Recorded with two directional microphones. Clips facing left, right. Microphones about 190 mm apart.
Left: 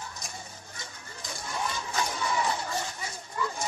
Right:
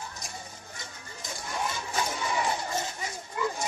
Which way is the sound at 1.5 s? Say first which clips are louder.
Right 1 dB; 15° right (ahead or behind).